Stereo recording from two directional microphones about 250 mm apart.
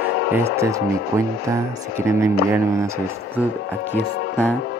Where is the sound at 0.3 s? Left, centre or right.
Centre.